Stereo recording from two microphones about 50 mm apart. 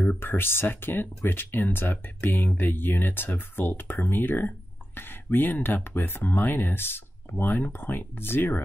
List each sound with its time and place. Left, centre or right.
0.0 s speech: left